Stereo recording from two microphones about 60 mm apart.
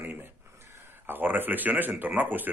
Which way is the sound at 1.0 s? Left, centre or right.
Right.